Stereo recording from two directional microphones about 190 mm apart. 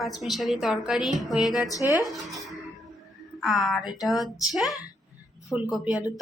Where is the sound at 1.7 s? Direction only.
20° left (ahead or behind).